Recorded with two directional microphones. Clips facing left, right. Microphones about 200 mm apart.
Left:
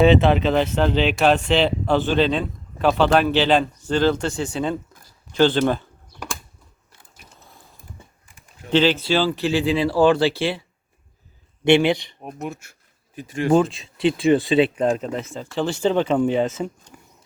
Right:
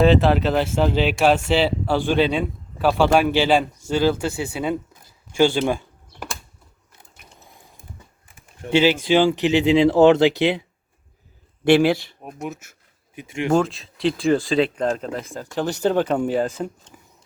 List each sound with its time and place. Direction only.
0.0 s a man's voice: centre (ahead or behind)
5.3 s a sound: 10° right (ahead or behind)
8.7 s speech: 10° right (ahead or behind)
11.8 s speech: 5° right (ahead or behind)
15.9 s a man's voice: 5° right (ahead or behind)